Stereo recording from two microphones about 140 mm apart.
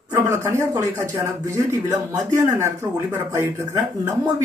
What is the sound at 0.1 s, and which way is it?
Speech, 20° right (ahead or behind).